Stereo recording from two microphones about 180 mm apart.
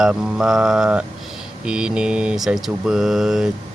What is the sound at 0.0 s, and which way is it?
Speech, centre (ahead or behind).